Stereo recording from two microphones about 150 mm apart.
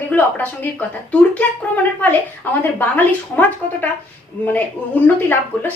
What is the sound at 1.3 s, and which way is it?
A woman's voice, 10° left (ahead or behind).